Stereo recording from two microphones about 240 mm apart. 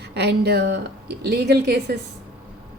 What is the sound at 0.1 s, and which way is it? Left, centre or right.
A woman's voice, right.